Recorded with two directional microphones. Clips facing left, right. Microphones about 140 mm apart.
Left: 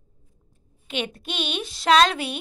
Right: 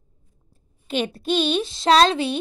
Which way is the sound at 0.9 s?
35° right (ahead or behind).